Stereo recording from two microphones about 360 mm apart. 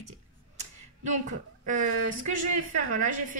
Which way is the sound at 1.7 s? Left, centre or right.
Right.